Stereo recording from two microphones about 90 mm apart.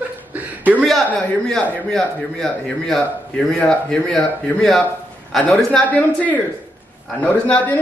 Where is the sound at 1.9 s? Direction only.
5° left (ahead or behind).